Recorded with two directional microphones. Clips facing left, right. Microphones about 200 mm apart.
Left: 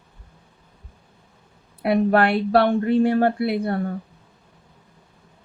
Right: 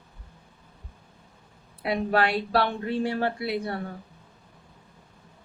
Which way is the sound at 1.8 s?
55° left (ahead or behind).